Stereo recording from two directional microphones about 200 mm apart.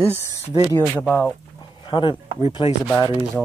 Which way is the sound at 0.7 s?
10° left (ahead or behind).